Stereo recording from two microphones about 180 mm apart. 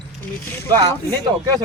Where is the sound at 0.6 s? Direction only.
20° right (ahead or behind).